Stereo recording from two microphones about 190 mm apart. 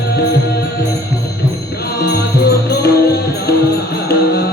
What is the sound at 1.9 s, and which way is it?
Music, 55° left (ahead or behind).